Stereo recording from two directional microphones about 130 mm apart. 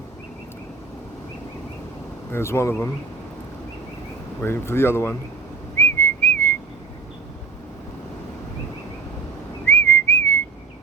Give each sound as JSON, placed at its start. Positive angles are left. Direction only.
{"t": 2.3, "sound": "speech", "side_deg": 20}
{"t": 4.4, "sound": "speech", "side_deg": 20}
{"t": 5.7, "sound": "whistling", "side_deg": 15}
{"t": 9.6, "sound": "whistling", "side_deg": 15}